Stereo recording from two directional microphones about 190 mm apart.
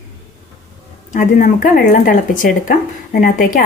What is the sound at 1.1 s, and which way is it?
Speech, 45° left (ahead or behind).